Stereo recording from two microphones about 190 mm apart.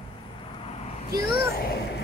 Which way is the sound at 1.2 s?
55° left (ahead or behind).